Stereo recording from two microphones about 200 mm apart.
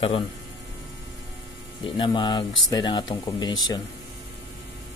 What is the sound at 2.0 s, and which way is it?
Speech, 25° left (ahead or behind).